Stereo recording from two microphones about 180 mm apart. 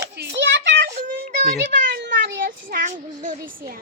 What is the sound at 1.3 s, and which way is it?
A child's voice, 65° right (ahead or behind).